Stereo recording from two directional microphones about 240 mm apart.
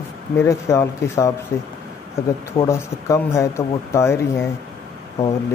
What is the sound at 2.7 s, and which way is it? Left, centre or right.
Speech, centre.